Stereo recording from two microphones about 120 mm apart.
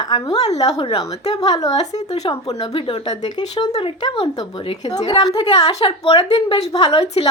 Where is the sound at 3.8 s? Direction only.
45° left (ahead or behind).